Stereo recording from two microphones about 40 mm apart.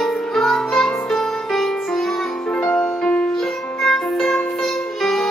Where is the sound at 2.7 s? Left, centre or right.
Left.